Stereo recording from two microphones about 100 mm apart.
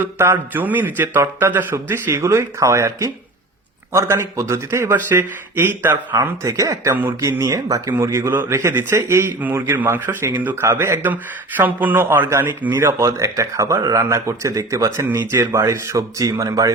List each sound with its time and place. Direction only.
0.0 s speech: 25° right (ahead or behind)
6.4 s speech: 35° right (ahead or behind)